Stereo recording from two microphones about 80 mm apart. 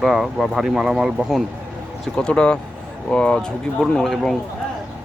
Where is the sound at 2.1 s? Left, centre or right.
Centre.